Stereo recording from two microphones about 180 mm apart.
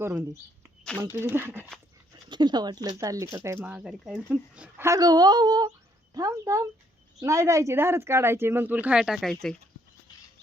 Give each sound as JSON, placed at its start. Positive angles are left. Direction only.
{"t": 0.0, "sound": "speech", "side_deg": -15}
{"t": 2.3, "sound": "speech", "side_deg": -25}